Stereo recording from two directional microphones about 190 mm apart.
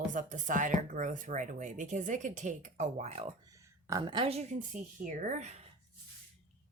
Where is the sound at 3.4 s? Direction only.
15° right (ahead or behind); by 5.5 s 40° right (ahead or behind).